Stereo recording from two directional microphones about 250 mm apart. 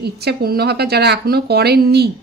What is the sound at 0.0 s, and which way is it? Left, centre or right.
A woman's voice, right.